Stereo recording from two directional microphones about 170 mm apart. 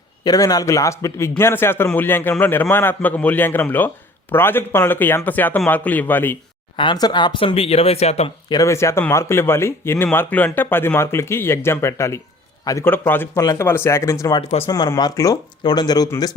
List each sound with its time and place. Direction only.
0.3 s a man's voice: 20° left (ahead or behind)
6.7 s speech: 25° left (ahead or behind)
8.4 s a man's voice: 20° left (ahead or behind)